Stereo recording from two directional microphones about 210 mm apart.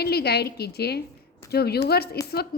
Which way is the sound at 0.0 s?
50° left (ahead or behind).